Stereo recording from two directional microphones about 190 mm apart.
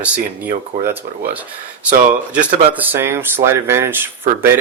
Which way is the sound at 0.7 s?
50° right (ahead or behind).